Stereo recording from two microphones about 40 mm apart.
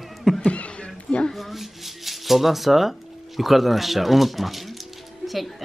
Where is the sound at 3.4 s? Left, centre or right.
Centre.